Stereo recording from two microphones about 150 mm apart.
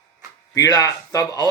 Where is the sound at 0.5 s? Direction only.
25° left (ahead or behind).